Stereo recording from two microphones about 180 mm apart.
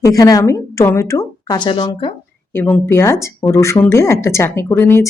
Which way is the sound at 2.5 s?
10° left (ahead or behind).